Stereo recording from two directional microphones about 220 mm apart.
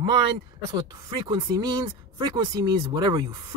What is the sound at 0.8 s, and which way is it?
Speech, 20° right (ahead or behind).